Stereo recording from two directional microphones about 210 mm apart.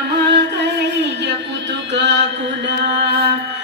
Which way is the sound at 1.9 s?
55° right (ahead or behind).